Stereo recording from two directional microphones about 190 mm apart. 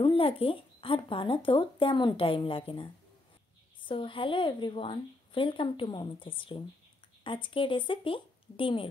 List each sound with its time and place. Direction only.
0.0 s speech: 30° left (ahead or behind)